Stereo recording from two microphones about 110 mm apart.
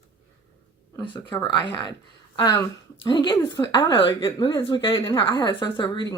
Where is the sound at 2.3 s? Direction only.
35° left (ahead or behind).